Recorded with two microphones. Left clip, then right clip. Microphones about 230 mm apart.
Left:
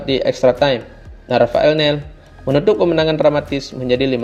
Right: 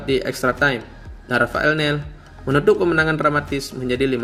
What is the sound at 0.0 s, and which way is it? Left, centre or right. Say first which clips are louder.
Speech: left 6 dB; centre.